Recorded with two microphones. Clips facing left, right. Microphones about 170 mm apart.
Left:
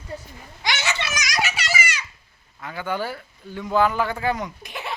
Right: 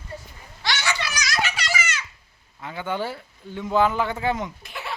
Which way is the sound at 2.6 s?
20° right (ahead or behind).